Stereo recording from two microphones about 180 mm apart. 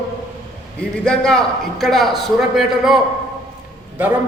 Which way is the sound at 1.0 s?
5° left (ahead or behind).